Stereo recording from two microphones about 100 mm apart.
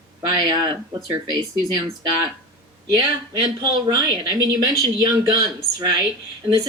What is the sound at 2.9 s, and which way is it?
Speech, 45° right (ahead or behind).